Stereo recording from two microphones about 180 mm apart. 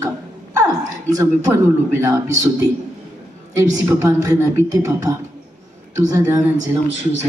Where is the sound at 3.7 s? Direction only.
15° right (ahead or behind).